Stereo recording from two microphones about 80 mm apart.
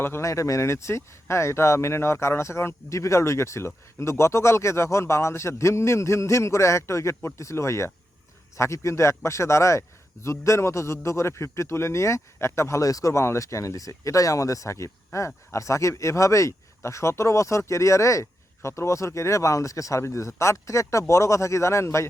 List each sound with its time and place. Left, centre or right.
0.0 s speech: left